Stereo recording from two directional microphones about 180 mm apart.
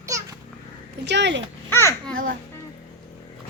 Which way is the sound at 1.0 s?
75° right (ahead or behind).